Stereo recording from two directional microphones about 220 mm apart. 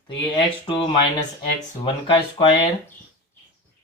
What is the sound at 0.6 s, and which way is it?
Speech, 20° left (ahead or behind).